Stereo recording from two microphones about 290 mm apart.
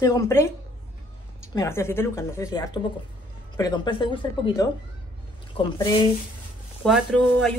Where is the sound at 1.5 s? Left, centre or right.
Centre.